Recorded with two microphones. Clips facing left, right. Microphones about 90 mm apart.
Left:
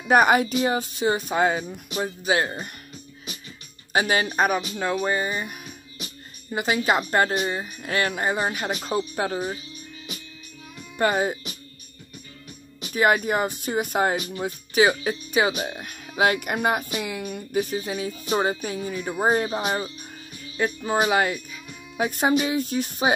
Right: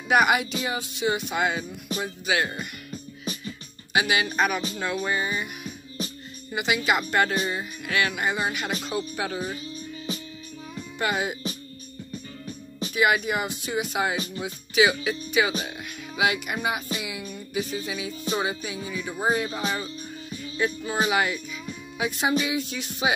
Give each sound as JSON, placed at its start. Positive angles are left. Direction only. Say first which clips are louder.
{"t": 0.1, "sound": "speech", "louder": "left 3 dB", "side_deg": 40}
{"t": 3.9, "sound": "speech", "louder": "left 2 dB", "side_deg": 40}
{"t": 11.0, "sound": "speech", "louder": "left 5 dB", "side_deg": 40}
{"t": 12.9, "sound": "speech", "louder": "left 3 dB", "side_deg": 40}
{"t": 21.9, "sound": "music", "louder": "left 3 dB", "side_deg": 45}
{"t": 22.4, "sound": "speech", "louder": "left 4 dB", "side_deg": 40}